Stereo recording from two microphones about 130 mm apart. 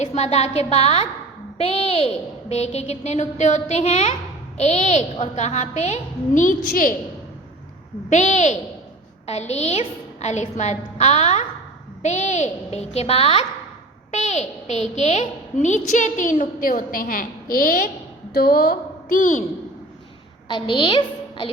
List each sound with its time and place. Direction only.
0.0 s a woman's voice: 55° left (ahead or behind); by 6.9 s 90° left
8.1 s a woman's voice: 65° left (ahead or behind)
14.1 s a child's voice: 60° left (ahead or behind); by 17.9 s 90° left
19.0 s a child's voice: 85° left
20.5 s a woman's voice: 40° left (ahead or behind)